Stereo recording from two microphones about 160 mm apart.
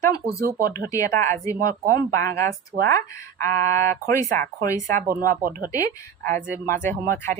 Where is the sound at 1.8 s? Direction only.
20° left (ahead or behind).